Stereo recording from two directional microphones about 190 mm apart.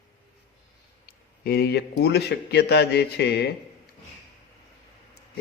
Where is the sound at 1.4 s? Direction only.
55° left (ahead or behind).